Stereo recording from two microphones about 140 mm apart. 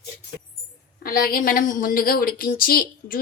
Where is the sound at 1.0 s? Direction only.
90° left.